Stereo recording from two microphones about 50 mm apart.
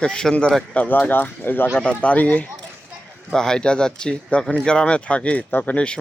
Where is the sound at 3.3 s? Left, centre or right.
Centre.